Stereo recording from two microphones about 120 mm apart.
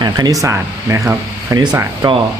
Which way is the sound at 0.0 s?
30° right (ahead or behind).